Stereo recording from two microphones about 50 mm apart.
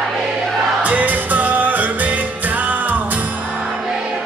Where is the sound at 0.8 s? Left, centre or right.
Right.